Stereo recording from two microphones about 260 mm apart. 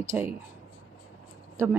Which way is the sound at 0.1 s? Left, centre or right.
Centre.